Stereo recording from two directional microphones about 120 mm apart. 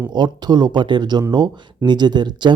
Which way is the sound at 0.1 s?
35° right (ahead or behind).